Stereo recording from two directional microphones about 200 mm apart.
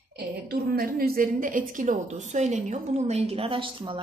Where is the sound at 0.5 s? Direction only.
50° right (ahead or behind).